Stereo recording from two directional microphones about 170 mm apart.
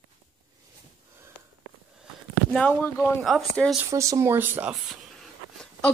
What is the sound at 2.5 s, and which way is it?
Speech, 10° left (ahead or behind).